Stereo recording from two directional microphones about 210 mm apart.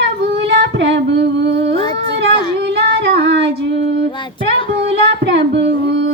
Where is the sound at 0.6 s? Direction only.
60° right (ahead or behind).